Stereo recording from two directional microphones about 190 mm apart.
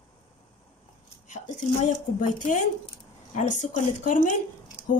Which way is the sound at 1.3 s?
40° left (ahead or behind).